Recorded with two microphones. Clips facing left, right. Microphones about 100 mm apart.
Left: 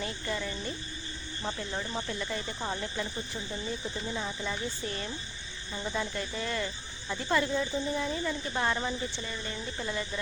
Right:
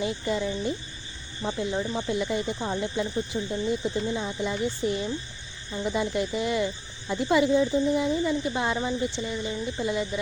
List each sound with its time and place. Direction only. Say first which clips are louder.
0.0 s speech: right 7 dB; 20° right (ahead or behind)
2.6 s speech: right 6 dB; 5° right (ahead or behind)
3.3 s speech: right 9 dB; 20° right (ahead or behind)